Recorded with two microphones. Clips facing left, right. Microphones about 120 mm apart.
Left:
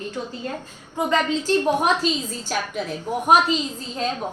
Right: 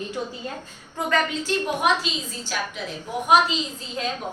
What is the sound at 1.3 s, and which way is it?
Speech, 35° left (ahead or behind).